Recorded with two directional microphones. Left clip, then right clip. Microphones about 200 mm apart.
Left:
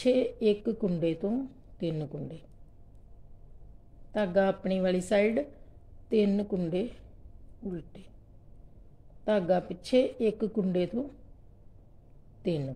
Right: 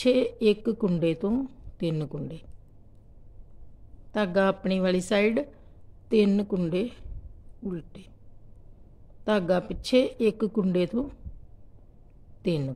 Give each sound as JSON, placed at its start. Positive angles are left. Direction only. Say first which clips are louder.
{"t": 0.0, "sound": "a woman's voice", "louder": "right 3 dB", "side_deg": -20}
{"t": 4.1, "sound": "a woman's voice", "louder": "right 2 dB", "side_deg": -20}
{"t": 9.2, "sound": "a woman's voice", "louder": "right 2 dB", "side_deg": -20}
{"t": 12.4, "sound": "speech", "louder": "right 3 dB", "side_deg": -20}